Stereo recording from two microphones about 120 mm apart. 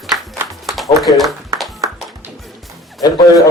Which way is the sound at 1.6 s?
Centre (ahead or behind).